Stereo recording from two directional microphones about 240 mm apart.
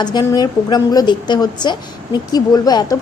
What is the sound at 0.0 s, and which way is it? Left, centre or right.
A woman's voice, centre.